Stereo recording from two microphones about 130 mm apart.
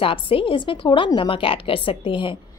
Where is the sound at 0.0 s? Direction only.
45° left (ahead or behind).